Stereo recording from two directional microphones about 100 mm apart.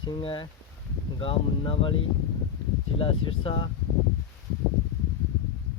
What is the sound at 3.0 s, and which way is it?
Speech, 65° left (ahead or behind).